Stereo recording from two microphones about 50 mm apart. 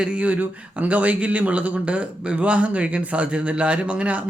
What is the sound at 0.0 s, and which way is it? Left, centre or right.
Speech, right.